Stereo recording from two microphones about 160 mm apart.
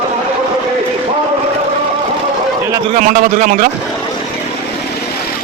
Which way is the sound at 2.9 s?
55° right (ahead or behind).